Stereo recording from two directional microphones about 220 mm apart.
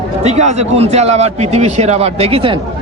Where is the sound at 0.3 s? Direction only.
30° right (ahead or behind).